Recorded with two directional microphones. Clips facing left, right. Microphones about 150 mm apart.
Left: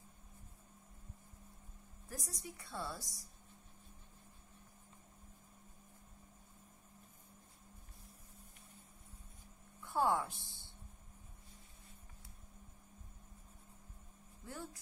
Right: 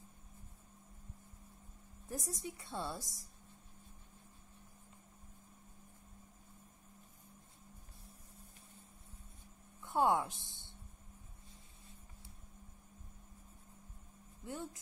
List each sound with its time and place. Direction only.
2.0 s a woman's voice: 25° right (ahead or behind)
9.8 s a woman's voice: 20° right (ahead or behind)
14.4 s speech: 20° right (ahead or behind)